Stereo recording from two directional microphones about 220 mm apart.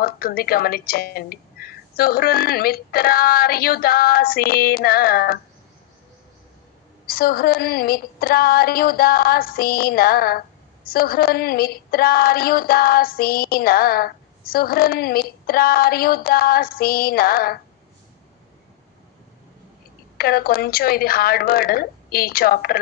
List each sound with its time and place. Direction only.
0.0 s a woman's voice: 45° left (ahead or behind)
7.1 s a woman's voice: 45° left (ahead or behind)
20.2 s a woman's voice: 45° left (ahead or behind)